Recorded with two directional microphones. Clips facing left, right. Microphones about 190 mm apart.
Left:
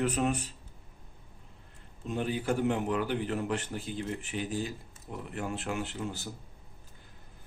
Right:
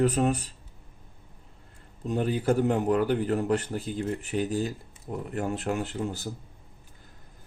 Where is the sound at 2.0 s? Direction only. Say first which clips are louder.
Right 5 dB; 40° right (ahead or behind).